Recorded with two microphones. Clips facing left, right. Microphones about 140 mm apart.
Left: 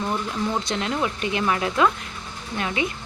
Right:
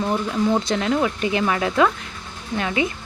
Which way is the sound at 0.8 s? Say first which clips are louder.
Right 4 dB; 30° right (ahead or behind).